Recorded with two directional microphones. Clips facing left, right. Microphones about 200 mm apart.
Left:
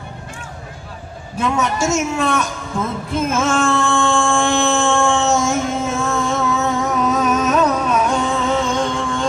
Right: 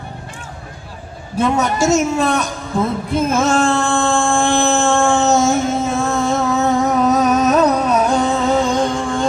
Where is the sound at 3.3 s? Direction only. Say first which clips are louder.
Right 2 dB; 35° right (ahead or behind).